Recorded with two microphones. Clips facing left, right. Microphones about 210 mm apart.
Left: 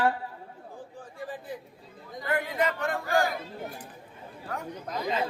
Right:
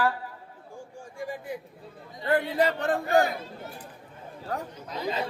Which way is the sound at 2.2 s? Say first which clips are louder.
Right 4 dB; 35° right (ahead or behind).